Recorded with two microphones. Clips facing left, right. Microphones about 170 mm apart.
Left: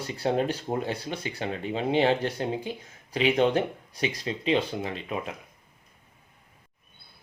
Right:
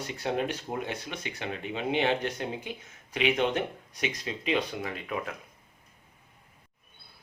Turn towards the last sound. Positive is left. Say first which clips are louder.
# left 2 dB
turn(degrees=20)  # may be behind; listen again after turning